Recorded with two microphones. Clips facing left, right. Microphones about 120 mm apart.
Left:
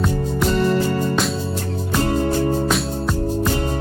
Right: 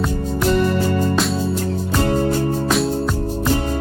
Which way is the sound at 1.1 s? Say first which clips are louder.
Right 1 dB; centre (ahead or behind).